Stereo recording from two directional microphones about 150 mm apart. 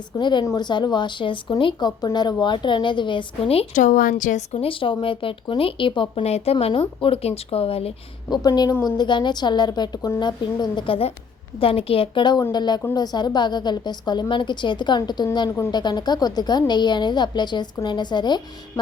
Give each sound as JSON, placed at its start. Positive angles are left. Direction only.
{"t": 0.2, "sound": "speech", "side_deg": 30}
{"t": 3.8, "sound": "a woman's voice", "side_deg": 60}
{"t": 4.5, "sound": "speech", "side_deg": 35}
{"t": 8.3, "sound": "a woman's voice", "side_deg": 25}